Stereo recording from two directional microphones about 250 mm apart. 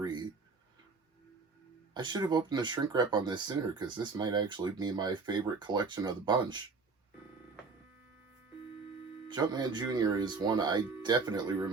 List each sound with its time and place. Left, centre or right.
0.0 s a sound: centre
1.9 s speech: centre
9.3 s speech: centre